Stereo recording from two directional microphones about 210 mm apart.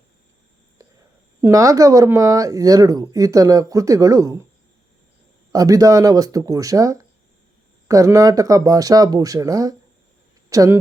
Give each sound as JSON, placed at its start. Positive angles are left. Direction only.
{"t": 0.8, "sound": "a sound", "side_deg": -15}
{"t": 1.4, "sound": "speech", "side_deg": -15}
{"t": 5.5, "sound": "speech", "side_deg": -15}